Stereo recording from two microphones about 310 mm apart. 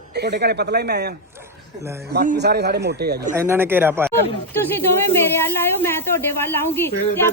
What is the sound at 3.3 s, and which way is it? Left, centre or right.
Speech, centre.